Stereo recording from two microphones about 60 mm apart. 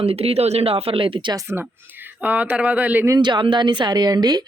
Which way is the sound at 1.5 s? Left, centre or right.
Right.